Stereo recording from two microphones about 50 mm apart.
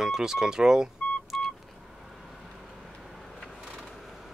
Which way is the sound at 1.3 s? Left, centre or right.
Centre.